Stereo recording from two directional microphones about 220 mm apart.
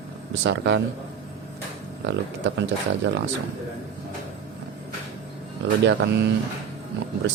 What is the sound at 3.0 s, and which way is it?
Speech, 55° right (ahead or behind).